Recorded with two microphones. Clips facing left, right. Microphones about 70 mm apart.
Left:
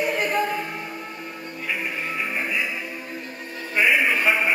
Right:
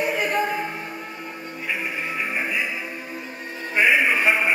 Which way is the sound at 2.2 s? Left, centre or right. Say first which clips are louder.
Right 1 dB; centre.